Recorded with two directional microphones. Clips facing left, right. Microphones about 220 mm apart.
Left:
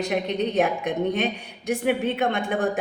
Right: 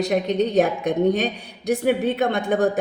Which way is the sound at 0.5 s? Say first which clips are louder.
Right 4 dB; 35° right (ahead or behind).